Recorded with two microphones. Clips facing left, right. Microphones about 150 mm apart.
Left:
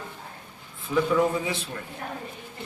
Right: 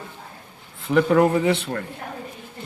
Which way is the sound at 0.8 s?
70° right (ahead or behind).